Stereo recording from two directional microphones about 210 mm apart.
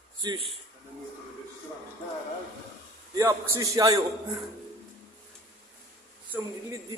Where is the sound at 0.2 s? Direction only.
20° right (ahead or behind).